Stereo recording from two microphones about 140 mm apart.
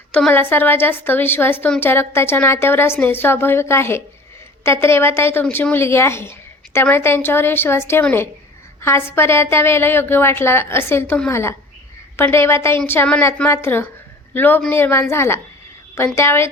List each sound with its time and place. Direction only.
0.1 s a woman's voice: 10° left (ahead or behind)